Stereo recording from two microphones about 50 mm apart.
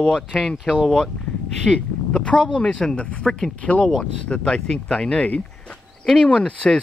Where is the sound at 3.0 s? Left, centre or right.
Left.